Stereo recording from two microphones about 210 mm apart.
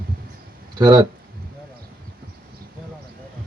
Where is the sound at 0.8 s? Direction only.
20° right (ahead or behind).